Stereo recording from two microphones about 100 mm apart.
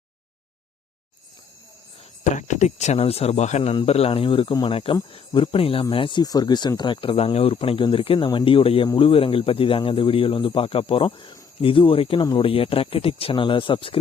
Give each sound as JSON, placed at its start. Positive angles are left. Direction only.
{"t": 2.7, "sound": "speech", "side_deg": 90}
{"t": 5.9, "sound": "speech", "side_deg": 55}
{"t": 6.2, "sound": "speech", "side_deg": 45}